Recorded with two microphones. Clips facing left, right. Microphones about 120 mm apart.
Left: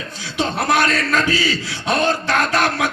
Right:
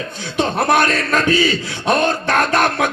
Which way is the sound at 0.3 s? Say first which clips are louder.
Right 3 dB; 55° right (ahead or behind).